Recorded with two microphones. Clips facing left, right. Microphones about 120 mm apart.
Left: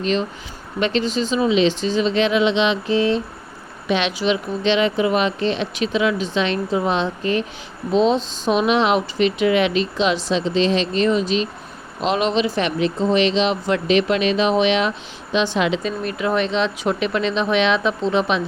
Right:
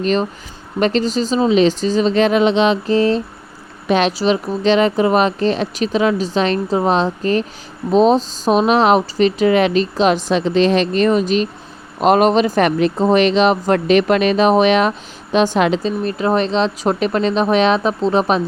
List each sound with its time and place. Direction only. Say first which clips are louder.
0.0 s speech: right 4 dB; 45° right (ahead or behind)
15.8 s speech: right 4 dB; 35° right (ahead or behind)